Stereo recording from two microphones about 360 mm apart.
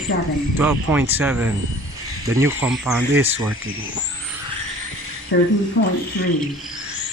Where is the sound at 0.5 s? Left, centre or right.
Centre.